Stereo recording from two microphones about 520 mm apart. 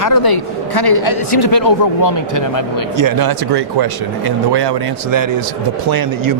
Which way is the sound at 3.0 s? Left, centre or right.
Right.